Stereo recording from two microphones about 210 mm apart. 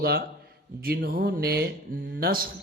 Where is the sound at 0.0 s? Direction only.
45° right (ahead or behind).